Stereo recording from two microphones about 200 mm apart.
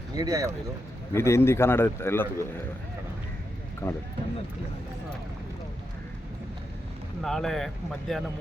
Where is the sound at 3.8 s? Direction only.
10° left (ahead or behind).